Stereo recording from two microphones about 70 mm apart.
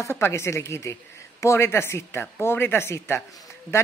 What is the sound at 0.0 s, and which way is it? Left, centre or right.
A woman's voice, left.